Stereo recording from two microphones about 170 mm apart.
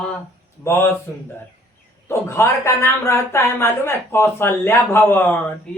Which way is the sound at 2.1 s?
15° left (ahead or behind).